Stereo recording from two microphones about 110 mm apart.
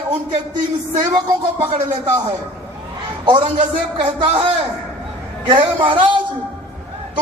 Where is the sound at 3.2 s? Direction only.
45° right (ahead or behind).